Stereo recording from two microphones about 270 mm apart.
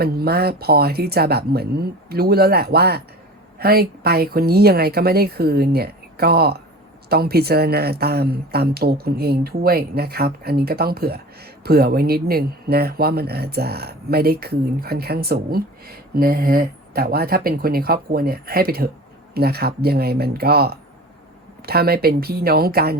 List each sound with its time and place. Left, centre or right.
0.0 s speech: right